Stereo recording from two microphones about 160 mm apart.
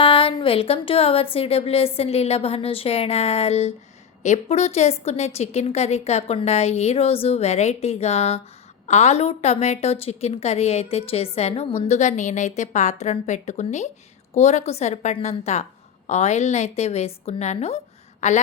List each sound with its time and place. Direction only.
0.0 s a woman's voice: 35° left (ahead or behind)